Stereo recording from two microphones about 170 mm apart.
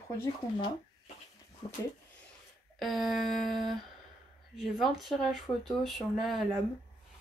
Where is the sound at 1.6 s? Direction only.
25° left (ahead or behind).